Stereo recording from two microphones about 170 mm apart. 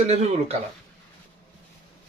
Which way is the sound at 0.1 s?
40° right (ahead or behind).